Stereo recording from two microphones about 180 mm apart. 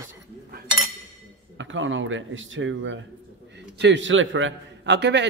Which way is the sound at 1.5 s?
90° right.